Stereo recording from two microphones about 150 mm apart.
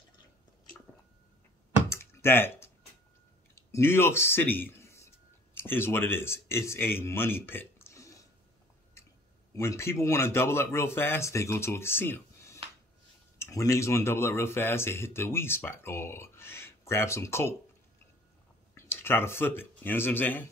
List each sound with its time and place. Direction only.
1.9 s typing: 15° left (ahead or behind)
3.7 s speech: 15° left (ahead or behind)
9.6 s speech: 20° left (ahead or behind)
18.8 s speech: 15° left (ahead or behind)